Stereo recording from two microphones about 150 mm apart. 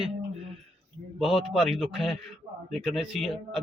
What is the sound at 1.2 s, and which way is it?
Speech, centre (ahead or behind).